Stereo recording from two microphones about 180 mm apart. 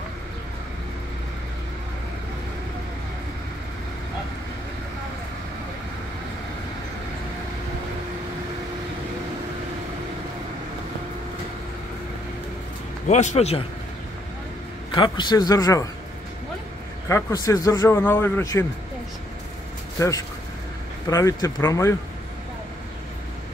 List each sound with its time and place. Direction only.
13.1 s a man's voice: 40° left (ahead or behind)
15.0 s a man's voice: 25° left (ahead or behind)
17.1 s a man's voice: 20° left (ahead or behind)
20.0 s a man's voice: 20° left (ahead or behind)